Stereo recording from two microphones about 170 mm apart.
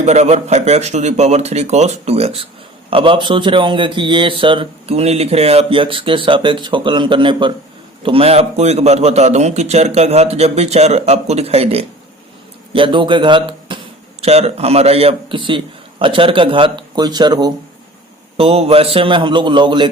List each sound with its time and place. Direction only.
0.0 s a man's voice: 40° right (ahead or behind); by 17.5 s 25° right (ahead or behind)
18.3 s a man's voice: 35° right (ahead or behind)